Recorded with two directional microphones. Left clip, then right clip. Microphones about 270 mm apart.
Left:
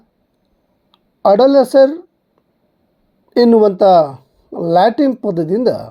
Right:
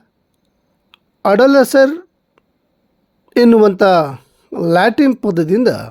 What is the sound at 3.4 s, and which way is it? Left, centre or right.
Speech, right.